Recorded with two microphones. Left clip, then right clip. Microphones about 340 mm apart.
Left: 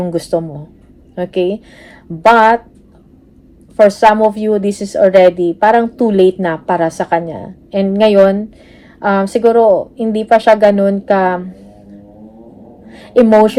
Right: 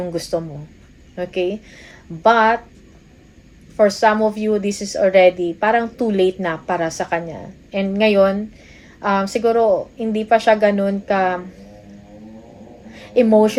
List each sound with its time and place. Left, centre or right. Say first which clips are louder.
0.0 s a woman's voice: left 6 dB; centre
3.8 s a woman's voice: left 7 dB; left
12.9 s a woman's voice: left 5 dB; centre